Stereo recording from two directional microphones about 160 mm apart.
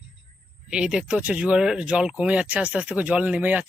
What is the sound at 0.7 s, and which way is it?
Speech, 5° right (ahead or behind).